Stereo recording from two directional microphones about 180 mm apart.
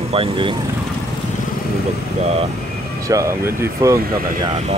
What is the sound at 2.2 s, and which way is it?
Speech, 35° right (ahead or behind).